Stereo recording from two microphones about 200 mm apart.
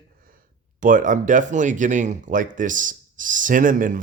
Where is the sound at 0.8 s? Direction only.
40° right (ahead or behind).